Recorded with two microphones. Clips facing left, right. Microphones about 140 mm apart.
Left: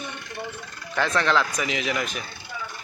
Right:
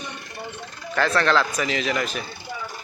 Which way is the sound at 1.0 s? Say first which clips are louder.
Right 2 dB; 15° left (ahead or behind).